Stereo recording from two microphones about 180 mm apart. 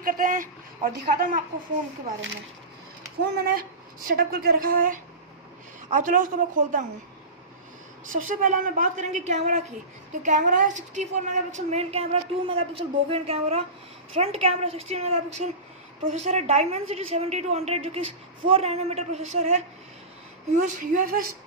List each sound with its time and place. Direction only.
0.0 s a woman's voice: 50° right (ahead or behind)
3.3 s a woman's voice: 55° right (ahead or behind)
8.1 s a woman's voice: 45° right (ahead or behind)